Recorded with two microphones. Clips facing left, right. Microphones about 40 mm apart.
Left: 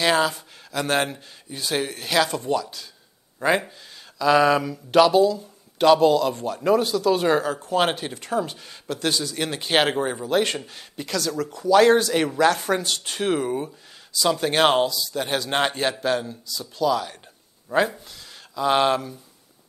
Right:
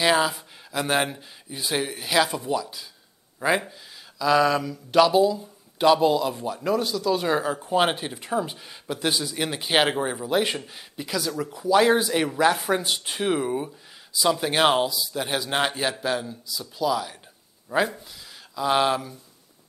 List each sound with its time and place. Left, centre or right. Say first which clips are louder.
0.0 s speech: left 1 dB; centre
3.3 s speech: left 2 dB; centre
4.2 s speech: left 3 dB; centre
5.1 s speech: left 2 dB; centre
6.6 s speech: left 5 dB; centre
7.3 s speech: left 1 dB; centre
12.1 s a man's voice: left 2 dB; centre
12.4 s a man's voice: left 1 dB; centre
14.9 s speech: left 1 dB; centre
15.1 s a man's voice: left 2 dB; centre
16.4 s a man's voice: left 3 dB; centre